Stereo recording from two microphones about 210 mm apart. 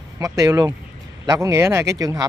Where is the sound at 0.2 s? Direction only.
15° right (ahead or behind).